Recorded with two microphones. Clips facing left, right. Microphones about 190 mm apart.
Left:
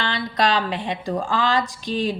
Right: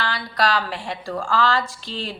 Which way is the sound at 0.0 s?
20° left (ahead or behind).